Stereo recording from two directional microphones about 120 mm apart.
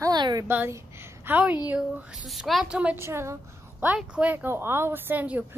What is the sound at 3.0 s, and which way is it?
A woman's voice, 20° right (ahead or behind).